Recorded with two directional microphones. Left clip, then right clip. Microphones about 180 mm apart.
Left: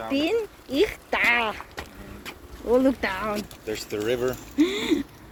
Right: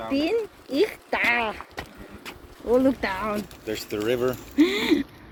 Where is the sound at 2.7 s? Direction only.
Centre (ahead or behind).